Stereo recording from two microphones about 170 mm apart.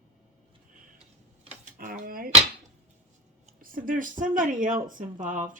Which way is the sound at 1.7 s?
55° right (ahead or behind).